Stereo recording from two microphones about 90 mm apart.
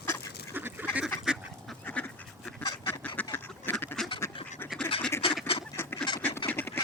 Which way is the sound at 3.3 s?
25° left (ahead or behind).